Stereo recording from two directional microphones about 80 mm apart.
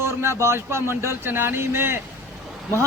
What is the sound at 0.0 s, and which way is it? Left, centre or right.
A man's voice, right.